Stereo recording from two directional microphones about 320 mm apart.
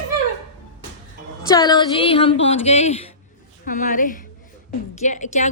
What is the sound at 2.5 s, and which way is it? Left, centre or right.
A woman's voice, centre.